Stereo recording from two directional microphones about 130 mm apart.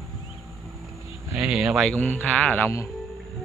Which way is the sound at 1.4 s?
5° right (ahead or behind).